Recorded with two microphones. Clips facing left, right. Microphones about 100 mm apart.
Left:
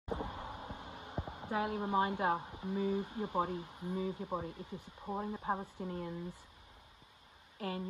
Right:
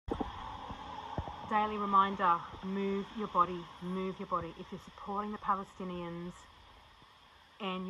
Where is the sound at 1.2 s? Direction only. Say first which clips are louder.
Left 1 dB; 45° left (ahead or behind).